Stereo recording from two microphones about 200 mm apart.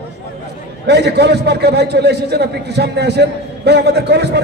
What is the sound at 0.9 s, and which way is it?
A man's voice, 55° right (ahead or behind).